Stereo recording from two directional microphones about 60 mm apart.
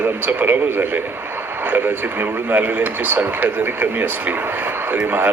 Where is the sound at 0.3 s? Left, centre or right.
Right.